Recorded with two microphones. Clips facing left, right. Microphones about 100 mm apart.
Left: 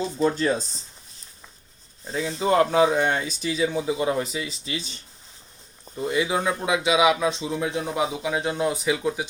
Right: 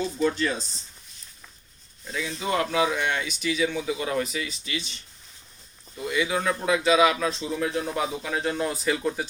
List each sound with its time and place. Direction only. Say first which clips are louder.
0.0 s speech: left 2 dB; 30° left (ahead or behind)
2.0 s speech: left 5 dB; 30° left (ahead or behind); by 9.2 s 10° left (ahead or behind)